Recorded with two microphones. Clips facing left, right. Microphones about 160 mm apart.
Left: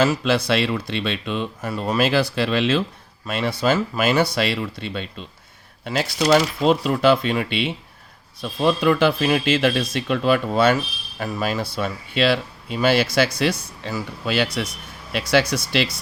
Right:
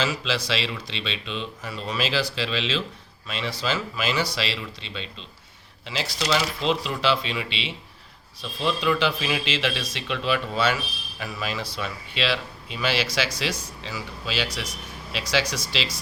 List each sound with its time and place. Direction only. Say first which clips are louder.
0.0 s speech: left 8 dB; 50° left (ahead or behind)